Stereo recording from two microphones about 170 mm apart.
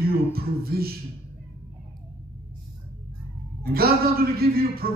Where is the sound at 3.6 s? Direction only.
65° right (ahead or behind).